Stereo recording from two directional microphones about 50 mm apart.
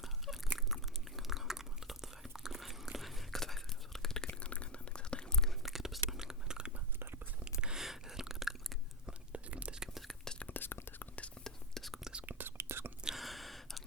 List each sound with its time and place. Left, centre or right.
0.0 s biting: centre
0.7 s whispering: centre
4.3 s chewing: left
5.6 s a sound: centre
9.0 s whispering: right
9.8 s whispering: centre
10.5 s whispering: left
11.4 s whispering: centre
12.2 s whispering: right
12.5 s whispering: right
13.1 s gasp: centre